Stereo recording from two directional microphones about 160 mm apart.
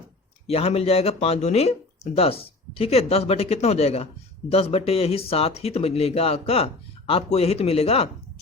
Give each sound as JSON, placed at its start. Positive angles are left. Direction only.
{"t": 0.4, "sound": "speech", "side_deg": 40}